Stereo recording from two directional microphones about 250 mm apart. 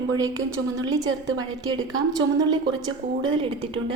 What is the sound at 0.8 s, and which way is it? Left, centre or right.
A woman's voice, centre.